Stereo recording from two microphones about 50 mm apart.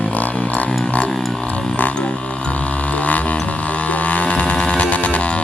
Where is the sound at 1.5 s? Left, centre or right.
Left.